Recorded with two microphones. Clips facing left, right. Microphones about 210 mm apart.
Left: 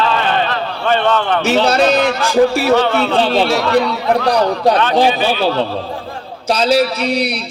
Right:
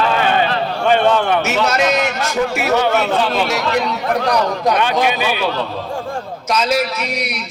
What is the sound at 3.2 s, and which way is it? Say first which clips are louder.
Music: left 4 dB; 30° left (ahead or behind).